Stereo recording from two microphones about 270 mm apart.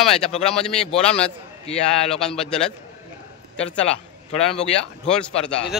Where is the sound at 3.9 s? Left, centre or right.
Left.